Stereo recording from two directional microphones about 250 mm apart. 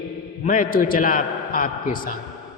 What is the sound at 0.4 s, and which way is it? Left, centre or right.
Mantra, left.